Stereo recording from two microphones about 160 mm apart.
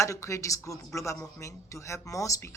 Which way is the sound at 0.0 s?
20° left (ahead or behind).